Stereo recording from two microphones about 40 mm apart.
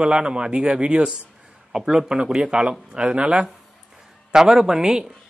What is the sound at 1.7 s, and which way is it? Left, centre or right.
A man's voice, centre.